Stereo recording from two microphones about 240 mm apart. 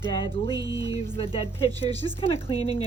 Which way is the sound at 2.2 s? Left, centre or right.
Left.